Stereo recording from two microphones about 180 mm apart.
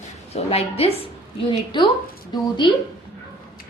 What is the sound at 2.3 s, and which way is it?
Speech, 25° left (ahead or behind).